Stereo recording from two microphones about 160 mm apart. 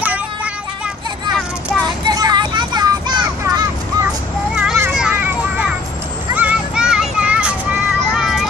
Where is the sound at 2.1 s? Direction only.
25° right (ahead or behind).